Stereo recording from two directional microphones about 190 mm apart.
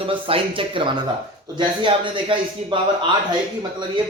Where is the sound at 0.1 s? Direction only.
30° right (ahead or behind).